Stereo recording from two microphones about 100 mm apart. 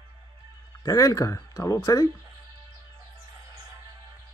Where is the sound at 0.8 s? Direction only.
35° left (ahead or behind).